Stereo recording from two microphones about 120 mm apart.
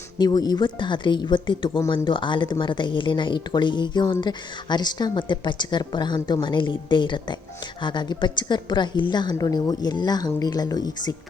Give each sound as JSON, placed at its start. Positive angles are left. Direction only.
{"t": 0.2, "sound": "speech", "side_deg": 35}